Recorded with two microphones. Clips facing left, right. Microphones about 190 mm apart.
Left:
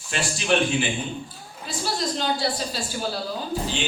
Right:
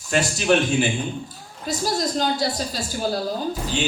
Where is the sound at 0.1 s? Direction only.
45° right (ahead or behind).